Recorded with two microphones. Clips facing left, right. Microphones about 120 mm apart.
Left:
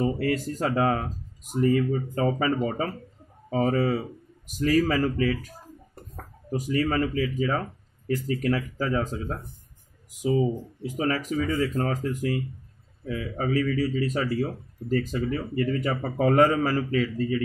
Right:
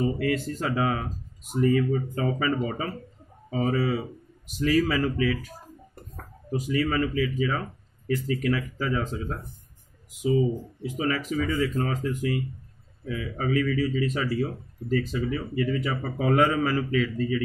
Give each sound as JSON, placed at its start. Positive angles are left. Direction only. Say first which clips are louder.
{"t": 0.0, "sound": "a man's voice", "louder": "even", "side_deg": 40}
{"t": 6.5, "sound": "speech", "louder": "left 1 dB", "side_deg": 40}
{"t": 11.0, "sound": "a man's voice", "louder": "left 1 dB", "side_deg": 40}